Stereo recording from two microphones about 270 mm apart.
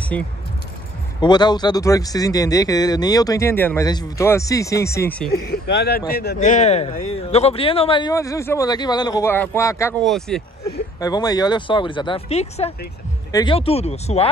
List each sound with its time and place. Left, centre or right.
1.2 s speech: centre
5.5 s speech: left; by 10.4 s centre
11.0 s speech: centre